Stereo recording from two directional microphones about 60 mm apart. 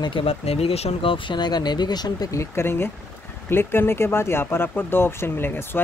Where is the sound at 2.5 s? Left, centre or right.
Left.